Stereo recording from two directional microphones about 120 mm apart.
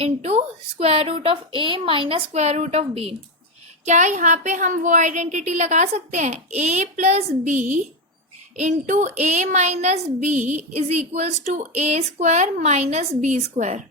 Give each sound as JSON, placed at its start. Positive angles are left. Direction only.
{"t": 0.0, "sound": "a woman's voice", "side_deg": -60}
{"t": 3.8, "sound": "a woman's voice", "side_deg": -85}
{"t": 10.8, "sound": "a woman's voice", "side_deg": -65}